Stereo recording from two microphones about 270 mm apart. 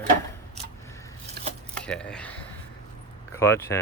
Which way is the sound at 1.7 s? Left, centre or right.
Centre.